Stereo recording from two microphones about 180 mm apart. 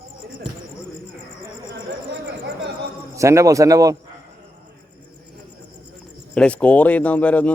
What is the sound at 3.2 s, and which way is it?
Speech, 15° right (ahead or behind).